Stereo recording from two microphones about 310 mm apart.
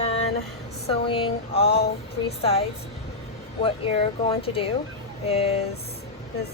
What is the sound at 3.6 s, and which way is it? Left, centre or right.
A woman's voice, centre.